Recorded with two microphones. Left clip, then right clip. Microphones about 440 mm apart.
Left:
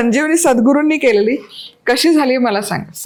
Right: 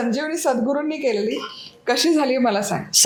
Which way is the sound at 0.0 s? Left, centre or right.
Left.